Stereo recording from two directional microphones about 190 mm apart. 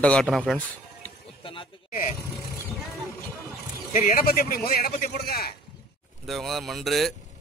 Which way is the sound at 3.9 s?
45° left (ahead or behind).